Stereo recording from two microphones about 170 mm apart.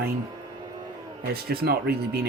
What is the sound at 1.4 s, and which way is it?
Speech, 65° right (ahead or behind).